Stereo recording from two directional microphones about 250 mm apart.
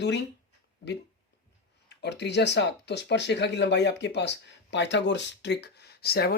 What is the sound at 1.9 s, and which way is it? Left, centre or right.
Speech, left.